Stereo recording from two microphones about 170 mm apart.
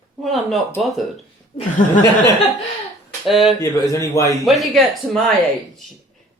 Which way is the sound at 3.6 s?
20° left (ahead or behind).